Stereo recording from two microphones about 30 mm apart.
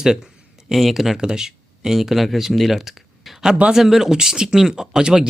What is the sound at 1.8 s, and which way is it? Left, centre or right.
Speech, centre.